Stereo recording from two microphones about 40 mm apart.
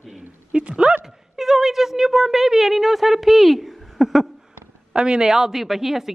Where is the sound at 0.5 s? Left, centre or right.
Right.